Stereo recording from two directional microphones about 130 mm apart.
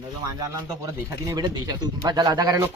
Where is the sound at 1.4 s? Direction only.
30° right (ahead or behind).